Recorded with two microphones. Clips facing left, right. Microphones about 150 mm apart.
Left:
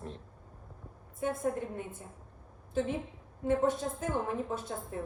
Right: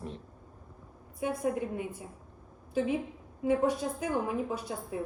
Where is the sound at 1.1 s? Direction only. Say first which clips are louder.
Right 1 dB; 25° left (ahead or behind).